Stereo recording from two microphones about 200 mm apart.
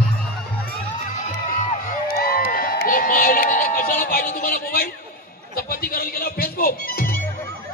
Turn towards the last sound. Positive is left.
turn(degrees=50)  # may be behind; listen again after turning